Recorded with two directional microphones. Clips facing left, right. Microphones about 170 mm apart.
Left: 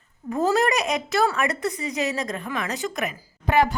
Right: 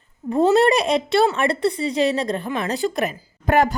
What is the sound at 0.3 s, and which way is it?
Speech, 30° right (ahead or behind).